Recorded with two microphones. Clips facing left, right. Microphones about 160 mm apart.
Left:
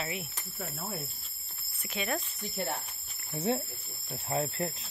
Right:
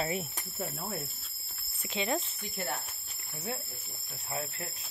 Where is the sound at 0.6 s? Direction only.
Centre (ahead or behind).